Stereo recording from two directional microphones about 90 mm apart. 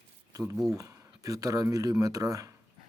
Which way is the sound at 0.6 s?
35° right (ahead or behind).